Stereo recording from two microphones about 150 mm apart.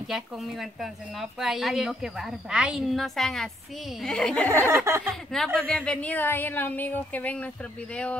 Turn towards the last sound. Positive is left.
turn(degrees=10)  # may be behind; listen again after turning